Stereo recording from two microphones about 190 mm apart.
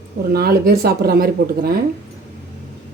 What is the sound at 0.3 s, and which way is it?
Speech, 55° right (ahead or behind).